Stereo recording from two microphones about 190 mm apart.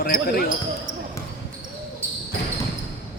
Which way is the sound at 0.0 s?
50° left (ahead or behind).